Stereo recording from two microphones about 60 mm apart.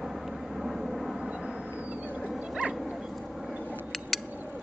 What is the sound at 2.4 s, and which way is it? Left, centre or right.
Dog, centre.